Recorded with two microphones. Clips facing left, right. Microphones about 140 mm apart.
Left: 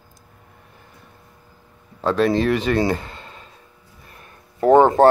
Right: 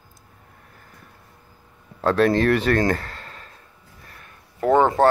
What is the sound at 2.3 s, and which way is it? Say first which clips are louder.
Speech: even; 10° left (ahead or behind).